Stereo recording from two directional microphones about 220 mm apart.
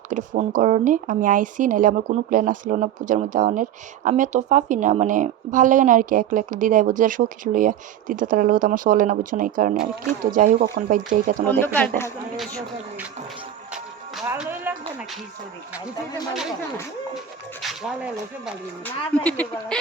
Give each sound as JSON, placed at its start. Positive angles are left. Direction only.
{"t": 0.1, "sound": "speech", "side_deg": -35}
{"t": 11.8, "sound": "speech", "side_deg": 10}
{"t": 12.4, "sound": "speech", "side_deg": 0}
{"t": 14.3, "sound": "music", "side_deg": -10}
{"t": 17.6, "sound": "speech", "side_deg": 0}